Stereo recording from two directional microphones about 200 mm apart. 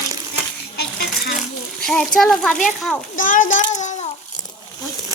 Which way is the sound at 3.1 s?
40° left (ahead or behind).